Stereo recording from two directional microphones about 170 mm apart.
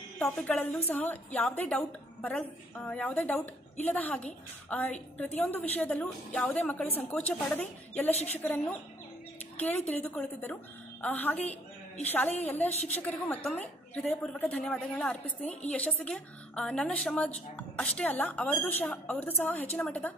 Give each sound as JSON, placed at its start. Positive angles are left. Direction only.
{"t": 0.2, "sound": "a woman's voice", "side_deg": 5}
{"t": 8.1, "sound": "a woman's voice", "side_deg": 40}
{"t": 8.4, "sound": "a woman's voice", "side_deg": 10}